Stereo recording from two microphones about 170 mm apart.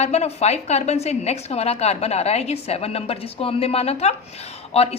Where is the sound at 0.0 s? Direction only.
40° left (ahead or behind).